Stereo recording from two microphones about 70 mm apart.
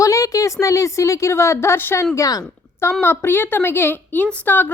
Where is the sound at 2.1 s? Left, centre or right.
Left.